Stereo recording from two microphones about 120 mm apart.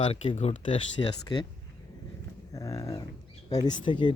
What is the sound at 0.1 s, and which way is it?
Speech, 65° left (ahead or behind).